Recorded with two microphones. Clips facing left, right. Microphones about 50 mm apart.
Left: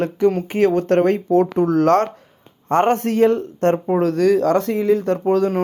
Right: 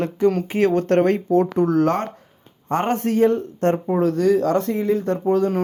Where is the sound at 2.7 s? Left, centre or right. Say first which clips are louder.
Left 4 dB; left.